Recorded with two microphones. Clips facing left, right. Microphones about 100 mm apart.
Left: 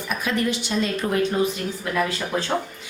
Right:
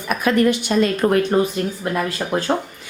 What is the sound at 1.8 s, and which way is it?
Speech, 40° right (ahead or behind).